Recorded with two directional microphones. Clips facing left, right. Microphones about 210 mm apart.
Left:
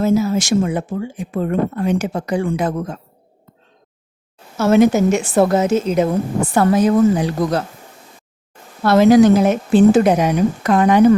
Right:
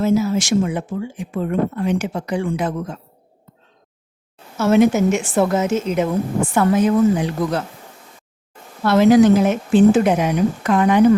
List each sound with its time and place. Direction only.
0.0 s a woman's voice: 40° left (ahead or behind)
4.5 s a woman's voice: 40° left (ahead or behind)
8.8 s a woman's voice: 40° left (ahead or behind)